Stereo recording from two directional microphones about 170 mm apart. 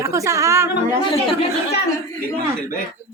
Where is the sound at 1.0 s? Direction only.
30° left (ahead or behind).